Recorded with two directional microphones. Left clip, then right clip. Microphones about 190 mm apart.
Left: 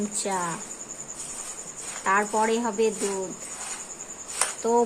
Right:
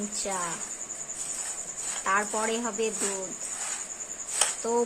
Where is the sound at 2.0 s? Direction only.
Centre (ahead or behind).